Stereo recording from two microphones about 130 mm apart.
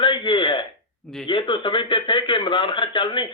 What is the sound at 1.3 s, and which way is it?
A man's voice, 40° left (ahead or behind).